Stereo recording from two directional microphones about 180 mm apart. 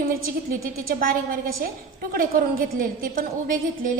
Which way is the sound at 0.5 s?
55° right (ahead or behind).